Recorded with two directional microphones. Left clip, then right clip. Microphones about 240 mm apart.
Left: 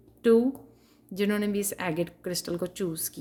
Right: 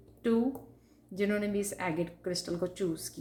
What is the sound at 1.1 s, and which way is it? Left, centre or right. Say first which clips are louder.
Speech: left 3 dB; left.